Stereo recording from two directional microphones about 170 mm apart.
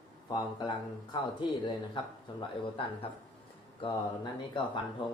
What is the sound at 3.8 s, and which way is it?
Speech, 30° left (ahead or behind).